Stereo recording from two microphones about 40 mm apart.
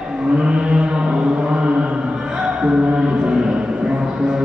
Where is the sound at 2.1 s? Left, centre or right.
Centre.